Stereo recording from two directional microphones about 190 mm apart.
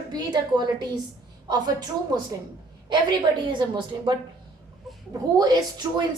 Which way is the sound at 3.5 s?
25° right (ahead or behind).